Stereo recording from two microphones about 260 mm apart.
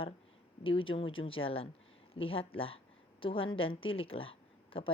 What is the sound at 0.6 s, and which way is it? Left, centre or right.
A woman's voice, centre.